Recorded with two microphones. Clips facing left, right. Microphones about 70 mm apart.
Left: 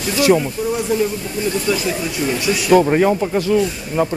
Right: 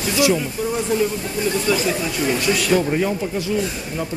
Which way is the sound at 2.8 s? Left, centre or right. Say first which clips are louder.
Left 6 dB; left.